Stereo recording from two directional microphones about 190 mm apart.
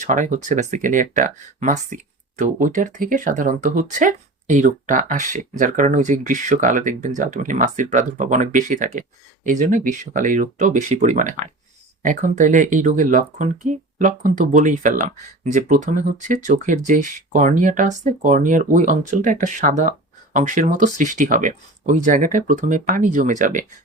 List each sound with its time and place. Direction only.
0.0 s speech: 40° right (ahead or behind)